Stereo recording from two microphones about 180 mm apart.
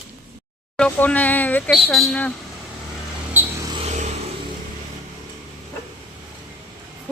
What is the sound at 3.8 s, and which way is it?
Vehicle, 40° right (ahead or behind).